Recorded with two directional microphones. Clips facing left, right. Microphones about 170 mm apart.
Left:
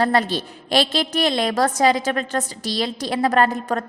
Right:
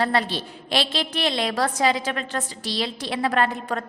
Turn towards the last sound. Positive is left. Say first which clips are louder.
# left 4 dB
turn(degrees=40)  # may be behind; listen again after turning